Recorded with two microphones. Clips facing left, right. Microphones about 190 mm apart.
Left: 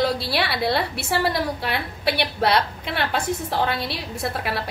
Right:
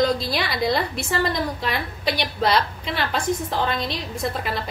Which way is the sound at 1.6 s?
65° left (ahead or behind).